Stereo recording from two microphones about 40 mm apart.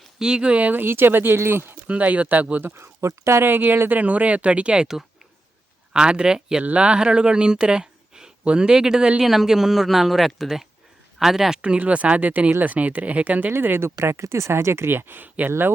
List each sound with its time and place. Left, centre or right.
0.2 s speech: right
0.5 s speech: right
0.9 s speech: right
1.9 s speech: right
3.3 s speech: right
3.9 s speech: right
5.9 s speech: right
9.2 s speech: centre
11.8 s speech: right
12.5 s speech: right
13.5 s speech: right